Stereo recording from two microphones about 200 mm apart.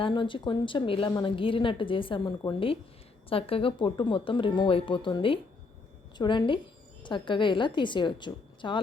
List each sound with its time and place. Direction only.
0.0 s a woman's voice: 25° left (ahead or behind)